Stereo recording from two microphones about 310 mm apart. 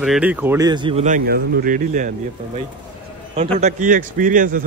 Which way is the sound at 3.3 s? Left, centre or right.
Centre.